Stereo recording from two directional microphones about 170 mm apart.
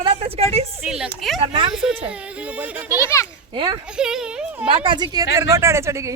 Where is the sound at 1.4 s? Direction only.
30° right (ahead or behind).